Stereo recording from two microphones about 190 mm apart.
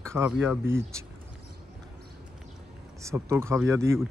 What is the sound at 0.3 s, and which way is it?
Speech, 10° right (ahead or behind).